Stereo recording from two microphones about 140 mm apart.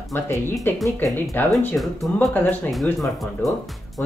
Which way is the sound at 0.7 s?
15° left (ahead or behind).